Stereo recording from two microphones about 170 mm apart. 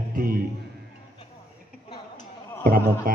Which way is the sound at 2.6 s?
55° right (ahead or behind).